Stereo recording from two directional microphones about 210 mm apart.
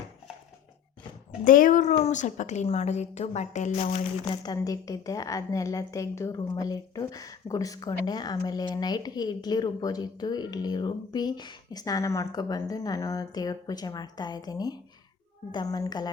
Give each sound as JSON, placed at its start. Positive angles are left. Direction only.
{"t": 1.5, "sound": "a woman's voice", "side_deg": 40}
{"t": 4.4, "sound": "a woman's voice", "side_deg": 15}